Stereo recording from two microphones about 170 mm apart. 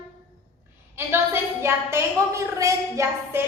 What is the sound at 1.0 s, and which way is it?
A woman's voice, 15° right (ahead or behind).